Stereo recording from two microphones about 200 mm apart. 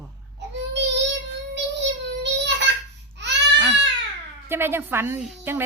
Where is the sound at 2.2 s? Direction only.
60° right (ahead or behind).